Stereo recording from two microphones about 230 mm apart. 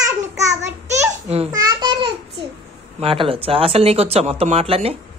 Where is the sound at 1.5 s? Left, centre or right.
Centre.